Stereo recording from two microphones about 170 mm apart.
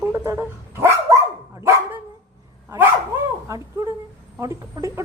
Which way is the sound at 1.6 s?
15° right (ahead or behind).